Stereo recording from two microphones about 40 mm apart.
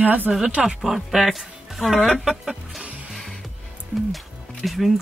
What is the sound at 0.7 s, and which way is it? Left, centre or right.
Speech, centre.